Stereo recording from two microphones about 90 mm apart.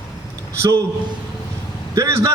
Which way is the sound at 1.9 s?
35° right (ahead or behind).